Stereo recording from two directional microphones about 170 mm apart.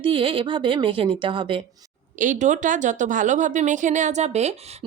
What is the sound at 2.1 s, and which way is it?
A woman's voice, 50° right (ahead or behind).